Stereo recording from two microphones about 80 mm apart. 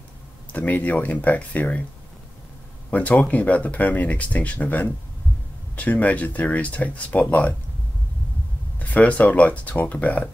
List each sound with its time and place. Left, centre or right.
0.5 s speech: centre
2.9 s speech: centre
8.7 s speech: centre